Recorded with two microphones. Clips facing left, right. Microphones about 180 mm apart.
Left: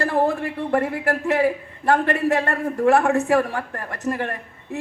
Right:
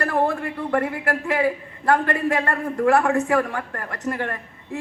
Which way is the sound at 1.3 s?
25° left (ahead or behind).